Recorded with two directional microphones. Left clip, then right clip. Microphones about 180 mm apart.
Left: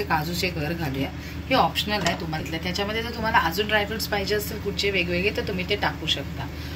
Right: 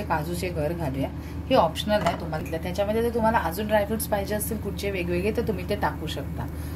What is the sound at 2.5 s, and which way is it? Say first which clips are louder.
A woman's voice: right 2 dB; 60° right (ahead or behind).